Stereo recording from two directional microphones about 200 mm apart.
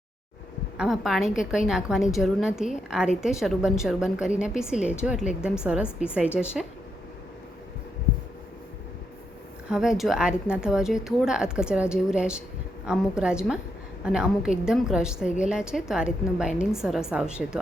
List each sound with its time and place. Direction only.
0.8 s a woman's voice: centre (ahead or behind)
9.6 s a woman's voice: 5° right (ahead or behind)